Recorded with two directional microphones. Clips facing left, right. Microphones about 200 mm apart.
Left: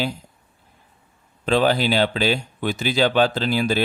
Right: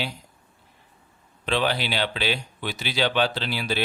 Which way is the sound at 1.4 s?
45° left (ahead or behind).